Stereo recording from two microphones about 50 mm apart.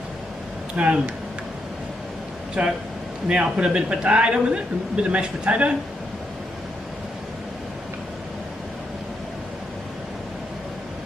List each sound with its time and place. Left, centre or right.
0.8 s speech: right
2.6 s speech: right